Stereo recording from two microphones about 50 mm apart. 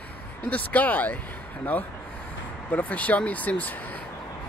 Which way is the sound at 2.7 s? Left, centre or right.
Left.